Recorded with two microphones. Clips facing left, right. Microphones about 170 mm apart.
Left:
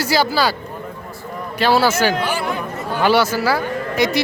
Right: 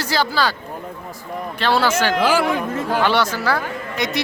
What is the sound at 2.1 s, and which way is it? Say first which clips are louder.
Speech: right 4 dB; 90° right.